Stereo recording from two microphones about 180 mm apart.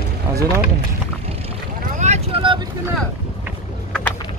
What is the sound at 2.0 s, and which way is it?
Boat, 35° right (ahead or behind).